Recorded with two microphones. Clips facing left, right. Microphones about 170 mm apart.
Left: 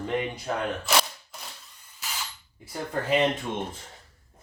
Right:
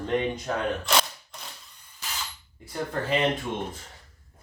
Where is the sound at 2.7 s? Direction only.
10° left (ahead or behind).